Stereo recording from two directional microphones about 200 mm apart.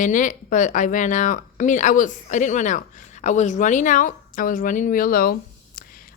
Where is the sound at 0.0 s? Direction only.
40° left (ahead or behind).